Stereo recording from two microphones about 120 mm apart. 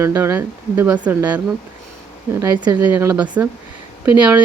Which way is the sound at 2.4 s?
35° right (ahead or behind).